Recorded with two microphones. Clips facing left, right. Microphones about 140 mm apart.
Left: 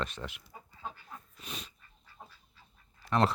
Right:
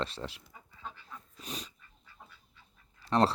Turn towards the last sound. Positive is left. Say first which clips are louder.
# right 1 dB
turn(degrees=-35)  # may be behind; listen again after turning